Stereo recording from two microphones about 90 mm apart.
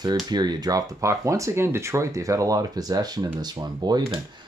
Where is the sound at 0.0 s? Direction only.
50° right (ahead or behind).